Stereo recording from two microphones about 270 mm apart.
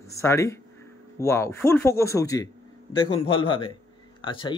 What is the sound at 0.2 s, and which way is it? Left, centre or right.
A man's voice, centre.